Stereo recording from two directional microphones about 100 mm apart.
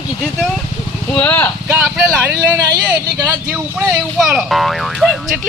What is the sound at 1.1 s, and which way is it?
Speech, 20° left (ahead or behind).